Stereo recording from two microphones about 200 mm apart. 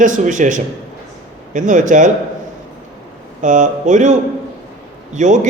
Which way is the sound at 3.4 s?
40° right (ahead or behind).